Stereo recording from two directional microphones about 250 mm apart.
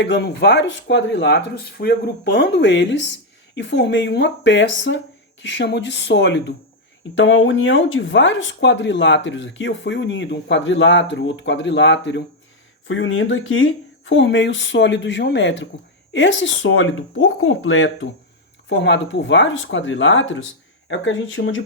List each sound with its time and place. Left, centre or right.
0.0 s speech: left